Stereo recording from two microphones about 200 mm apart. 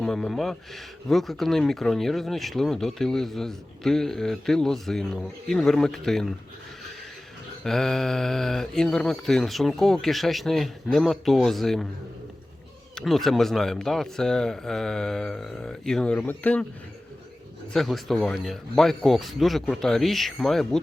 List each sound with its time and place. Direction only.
0.0 s speech: centre (ahead or behind)
7.6 s speech: centre (ahead or behind)
13.0 s speech: centre (ahead or behind)
17.7 s speech: centre (ahead or behind)